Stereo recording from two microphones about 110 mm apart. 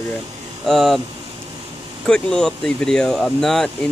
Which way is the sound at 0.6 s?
Centre (ahead or behind).